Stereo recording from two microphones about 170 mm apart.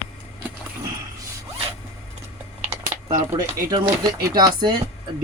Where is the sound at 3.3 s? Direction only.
20° right (ahead or behind).